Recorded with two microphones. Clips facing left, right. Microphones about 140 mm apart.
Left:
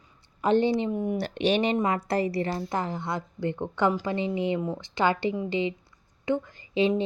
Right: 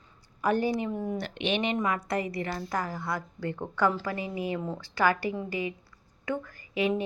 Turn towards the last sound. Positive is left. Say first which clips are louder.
# left 4 dB
turn(degrees=25)  # may be behind; listen again after turning